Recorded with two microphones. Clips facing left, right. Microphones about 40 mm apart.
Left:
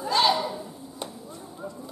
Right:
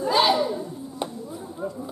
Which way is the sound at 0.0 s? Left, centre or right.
Centre.